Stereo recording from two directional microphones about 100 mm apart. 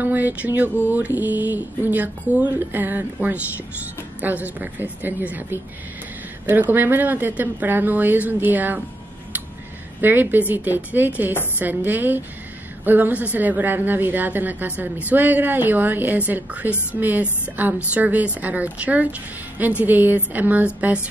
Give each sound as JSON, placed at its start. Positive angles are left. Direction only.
{"t": 0.0, "sound": "a sound", "side_deg": -15}
{"t": 0.8, "sound": "a woman's voice", "side_deg": -15}
{"t": 9.9, "sound": "a woman's voice", "side_deg": -20}